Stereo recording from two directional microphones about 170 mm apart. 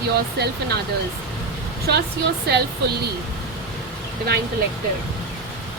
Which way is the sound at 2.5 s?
75° right (ahead or behind).